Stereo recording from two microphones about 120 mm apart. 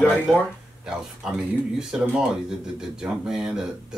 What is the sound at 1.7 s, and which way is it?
Speech, 5° right (ahead or behind).